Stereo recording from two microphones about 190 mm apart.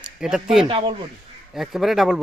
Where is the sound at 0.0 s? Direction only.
5° right (ahead or behind).